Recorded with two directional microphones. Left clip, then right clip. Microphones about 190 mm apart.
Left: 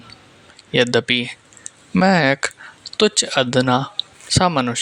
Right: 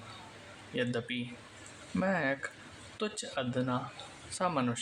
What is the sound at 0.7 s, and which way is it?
Speech, 50° left (ahead or behind).